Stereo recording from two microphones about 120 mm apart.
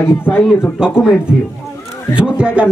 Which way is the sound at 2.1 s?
10° right (ahead or behind).